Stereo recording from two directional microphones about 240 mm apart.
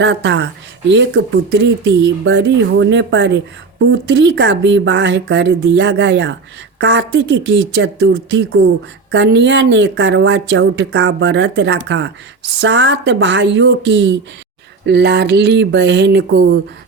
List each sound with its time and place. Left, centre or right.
0.0 s a woman's voice: right